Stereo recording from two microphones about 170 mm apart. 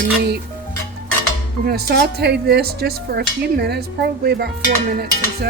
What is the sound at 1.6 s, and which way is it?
Speech, 65° right (ahead or behind).